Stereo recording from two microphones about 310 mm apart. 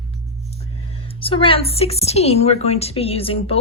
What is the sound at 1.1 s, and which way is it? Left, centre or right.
A woman's voice, centre.